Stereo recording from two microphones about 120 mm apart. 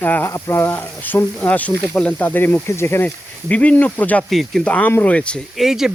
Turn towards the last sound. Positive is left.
turn(degrees=-5)  # may be behind; listen again after turning